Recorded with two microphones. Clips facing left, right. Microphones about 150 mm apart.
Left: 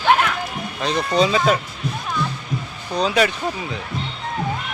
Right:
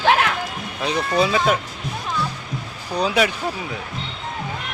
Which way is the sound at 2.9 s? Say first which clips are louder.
Left 1 dB; 10° right (ahead or behind).